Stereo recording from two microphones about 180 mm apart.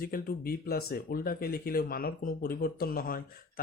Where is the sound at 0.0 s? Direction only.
50° left (ahead or behind).